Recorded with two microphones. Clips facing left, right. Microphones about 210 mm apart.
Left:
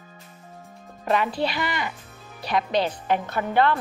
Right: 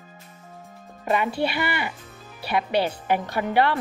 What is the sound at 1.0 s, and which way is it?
A woman's voice, 5° right (ahead or behind).